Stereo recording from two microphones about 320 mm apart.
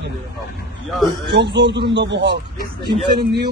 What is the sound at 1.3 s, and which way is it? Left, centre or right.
A man's voice, right.